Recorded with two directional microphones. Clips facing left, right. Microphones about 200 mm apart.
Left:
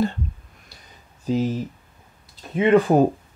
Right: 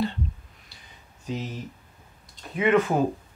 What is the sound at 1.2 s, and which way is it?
Speech, 35° left (ahead or behind).